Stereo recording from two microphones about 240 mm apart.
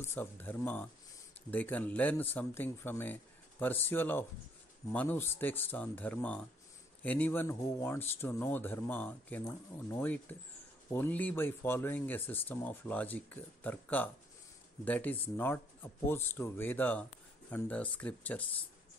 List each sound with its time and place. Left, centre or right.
0.0 s speech: centre